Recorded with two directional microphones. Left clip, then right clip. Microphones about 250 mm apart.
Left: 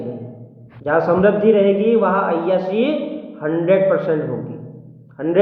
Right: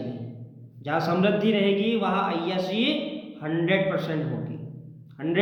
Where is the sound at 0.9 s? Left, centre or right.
Right.